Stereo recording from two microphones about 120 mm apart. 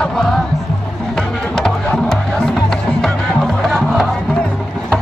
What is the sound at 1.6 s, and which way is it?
Music, 5° left (ahead or behind).